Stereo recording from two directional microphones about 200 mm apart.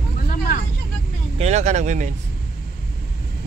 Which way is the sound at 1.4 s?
35° right (ahead or behind).